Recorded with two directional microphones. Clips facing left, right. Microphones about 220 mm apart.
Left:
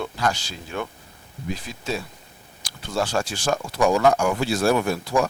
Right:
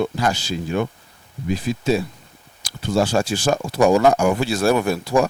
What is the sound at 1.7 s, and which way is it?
Speech, 5° right (ahead or behind).